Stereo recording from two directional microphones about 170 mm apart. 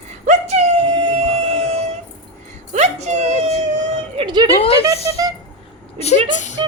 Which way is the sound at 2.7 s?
45° right (ahead or behind).